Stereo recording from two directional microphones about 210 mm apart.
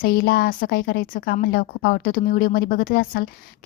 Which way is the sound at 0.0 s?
45° left (ahead or behind).